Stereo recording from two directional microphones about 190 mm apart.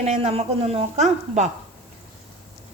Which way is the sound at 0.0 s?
35° right (ahead or behind).